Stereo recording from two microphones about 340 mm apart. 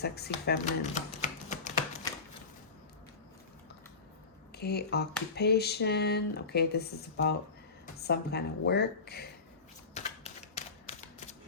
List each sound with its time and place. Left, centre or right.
0.0 s speech: left
4.5 s a sound: left
9.9 s typewriter: centre